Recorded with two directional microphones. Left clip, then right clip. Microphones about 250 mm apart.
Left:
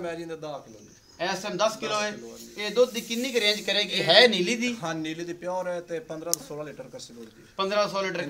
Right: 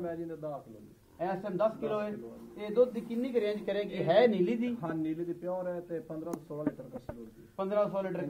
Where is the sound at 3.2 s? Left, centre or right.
Centre.